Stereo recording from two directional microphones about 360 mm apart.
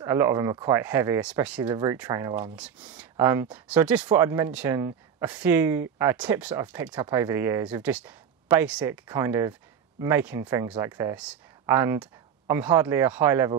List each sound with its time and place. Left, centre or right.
0.0 s speech: centre